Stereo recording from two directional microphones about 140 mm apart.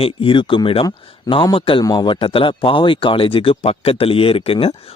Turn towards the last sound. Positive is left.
turn(degrees=45)  # may be behind; listen again after turning